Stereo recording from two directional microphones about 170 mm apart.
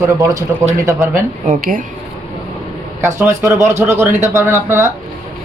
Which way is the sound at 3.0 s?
15° right (ahead or behind).